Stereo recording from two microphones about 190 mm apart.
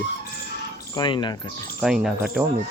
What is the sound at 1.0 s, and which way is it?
Speech, 25° left (ahead or behind).